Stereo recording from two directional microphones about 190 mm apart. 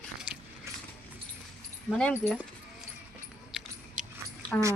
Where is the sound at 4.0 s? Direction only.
40° right (ahead or behind).